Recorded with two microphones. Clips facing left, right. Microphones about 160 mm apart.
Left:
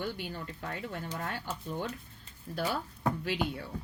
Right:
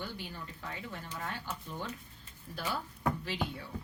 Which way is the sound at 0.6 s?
55° left (ahead or behind).